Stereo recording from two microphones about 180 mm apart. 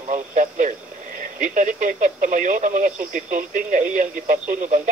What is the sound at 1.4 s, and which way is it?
Speech, 45° right (ahead or behind).